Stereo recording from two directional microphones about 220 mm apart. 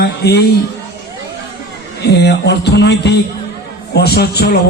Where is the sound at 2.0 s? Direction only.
50° left (ahead or behind).